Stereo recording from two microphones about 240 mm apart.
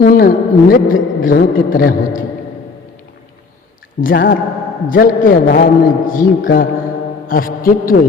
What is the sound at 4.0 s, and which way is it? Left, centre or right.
Speech, left.